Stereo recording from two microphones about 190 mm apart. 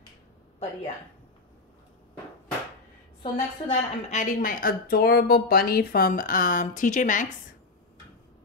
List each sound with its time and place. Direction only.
3.2 s a woman's voice: 35° left (ahead or behind)